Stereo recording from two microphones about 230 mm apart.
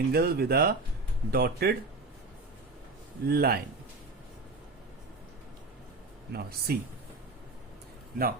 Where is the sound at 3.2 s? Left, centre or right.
Right.